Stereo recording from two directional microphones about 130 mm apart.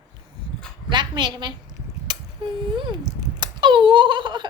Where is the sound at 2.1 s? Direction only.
35° right (ahead or behind).